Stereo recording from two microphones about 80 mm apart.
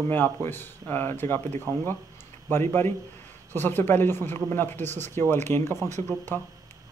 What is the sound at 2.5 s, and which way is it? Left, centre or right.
Speech, left.